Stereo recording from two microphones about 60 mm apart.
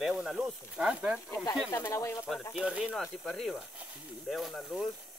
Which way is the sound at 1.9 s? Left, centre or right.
Left.